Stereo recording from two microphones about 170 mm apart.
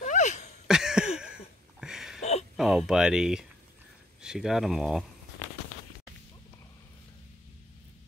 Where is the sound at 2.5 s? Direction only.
Centre (ahead or behind).